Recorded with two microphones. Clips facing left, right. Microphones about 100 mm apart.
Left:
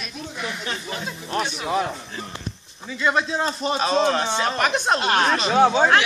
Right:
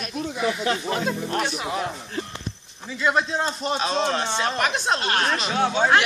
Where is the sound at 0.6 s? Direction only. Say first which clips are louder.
Right 6 dB; 65° right (ahead or behind).